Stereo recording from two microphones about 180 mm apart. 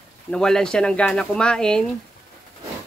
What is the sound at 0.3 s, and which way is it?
Speech, 5° left (ahead or behind).